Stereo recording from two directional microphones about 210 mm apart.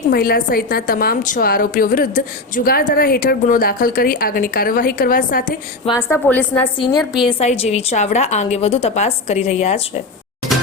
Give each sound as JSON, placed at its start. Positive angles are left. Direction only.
{"t": 0.1, "sound": "a woman's voice", "side_deg": 45}
{"t": 6.0, "sound": "a woman's voice", "side_deg": 10}
{"t": 7.0, "sound": "a woman's voice", "side_deg": 0}
{"t": 7.3, "sound": "a woman's voice", "side_deg": 30}